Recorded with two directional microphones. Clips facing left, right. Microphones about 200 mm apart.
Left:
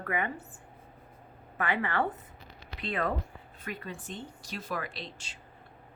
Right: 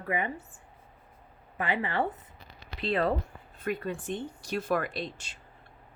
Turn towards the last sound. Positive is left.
turn(degrees=-50)  # may be behind; listen again after turning